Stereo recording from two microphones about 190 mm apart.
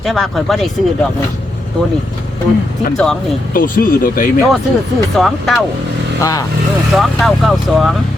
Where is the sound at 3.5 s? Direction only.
45° left (ahead or behind).